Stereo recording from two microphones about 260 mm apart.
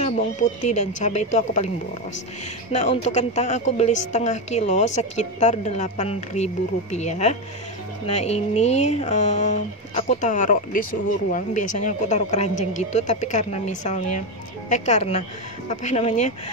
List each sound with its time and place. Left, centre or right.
0.0 s a woman's voice: left
2.7 s a woman's voice: left
11.8 s a woman's voice: left